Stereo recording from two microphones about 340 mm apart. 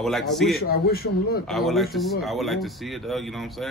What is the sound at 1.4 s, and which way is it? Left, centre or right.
Speech, centre.